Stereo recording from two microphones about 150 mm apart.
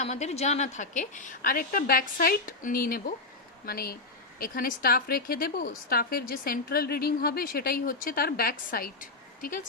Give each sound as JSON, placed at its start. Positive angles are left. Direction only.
{"t": 0.0, "sound": "a woman's voice", "side_deg": 45}